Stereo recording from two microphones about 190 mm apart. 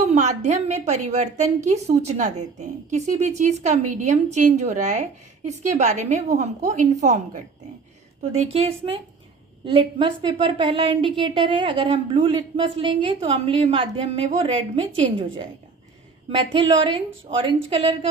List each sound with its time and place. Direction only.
0.1 s a woman's voice: 35° right (ahead or behind)
16.5 s a woman's voice: 25° right (ahead or behind)